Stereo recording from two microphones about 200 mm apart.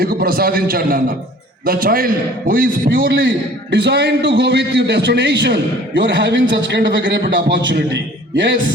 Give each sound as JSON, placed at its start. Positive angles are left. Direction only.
{"t": 0.0, "sound": "a man's voice", "side_deg": -50}
{"t": 3.2, "sound": "a man's voice", "side_deg": -60}